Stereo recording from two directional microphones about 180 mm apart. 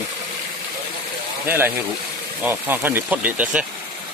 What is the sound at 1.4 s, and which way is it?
Speech, 10° right (ahead or behind).